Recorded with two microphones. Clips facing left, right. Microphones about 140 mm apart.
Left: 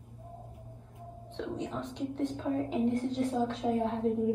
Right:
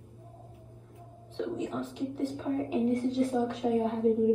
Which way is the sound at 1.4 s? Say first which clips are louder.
Right 3 dB; 5° right (ahead or behind).